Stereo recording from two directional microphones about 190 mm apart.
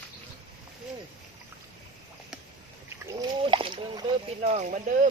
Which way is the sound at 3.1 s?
25° right (ahead or behind).